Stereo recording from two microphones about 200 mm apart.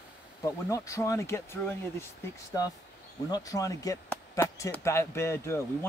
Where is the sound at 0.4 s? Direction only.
15° left (ahead or behind).